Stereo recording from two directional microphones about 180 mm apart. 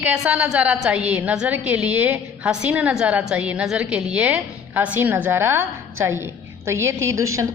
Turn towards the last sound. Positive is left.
turn(degrees=-15)  # may be behind; listen again after turning